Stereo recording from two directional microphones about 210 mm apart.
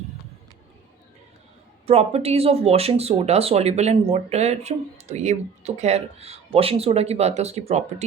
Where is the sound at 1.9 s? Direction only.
30° right (ahead or behind).